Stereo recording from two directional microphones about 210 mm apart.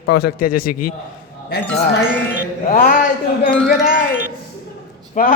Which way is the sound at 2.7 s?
40° left (ahead or behind).